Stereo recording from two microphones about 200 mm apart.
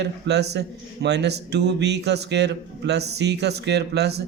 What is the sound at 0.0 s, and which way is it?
A man's voice, 60° right (ahead or behind).